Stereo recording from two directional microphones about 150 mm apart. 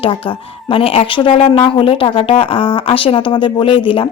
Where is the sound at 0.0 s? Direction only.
35° left (ahead or behind).